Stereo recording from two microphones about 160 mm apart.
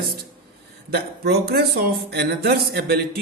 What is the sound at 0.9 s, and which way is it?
Speech, 80° right.